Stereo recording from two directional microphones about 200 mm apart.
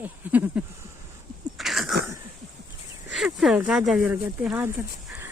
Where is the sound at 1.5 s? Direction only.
Centre (ahead or behind).